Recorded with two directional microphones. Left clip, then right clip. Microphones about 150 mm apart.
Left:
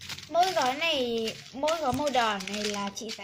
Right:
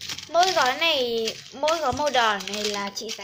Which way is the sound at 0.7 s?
10° left (ahead or behind).